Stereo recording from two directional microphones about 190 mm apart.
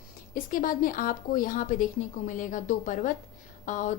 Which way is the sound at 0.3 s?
50° left (ahead or behind).